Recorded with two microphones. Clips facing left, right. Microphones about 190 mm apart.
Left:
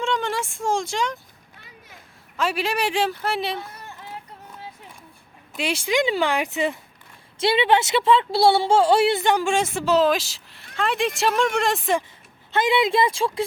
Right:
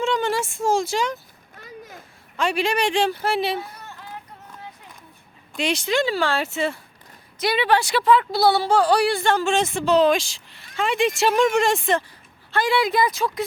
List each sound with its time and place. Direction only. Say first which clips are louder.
0.0 s speech: right 3 dB; centre (ahead or behind)
1.5 s a sound: right 10 dB; 45° right (ahead or behind)
2.4 s speech: right 2 dB; 5° left (ahead or behind)
5.5 s speech: even; 10° left (ahead or behind)
12.5 s speech: left 1 dB; 20° left (ahead or behind)